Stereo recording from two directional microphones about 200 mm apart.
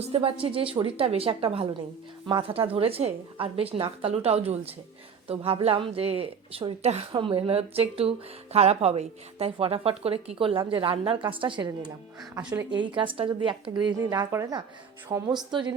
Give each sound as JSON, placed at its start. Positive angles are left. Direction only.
{"t": 0.0, "sound": "a woman's voice", "side_deg": -30}